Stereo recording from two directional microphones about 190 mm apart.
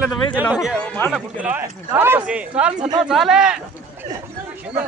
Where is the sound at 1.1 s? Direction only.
10° right (ahead or behind).